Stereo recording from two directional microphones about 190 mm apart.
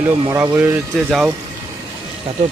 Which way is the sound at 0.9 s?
Centre (ahead or behind).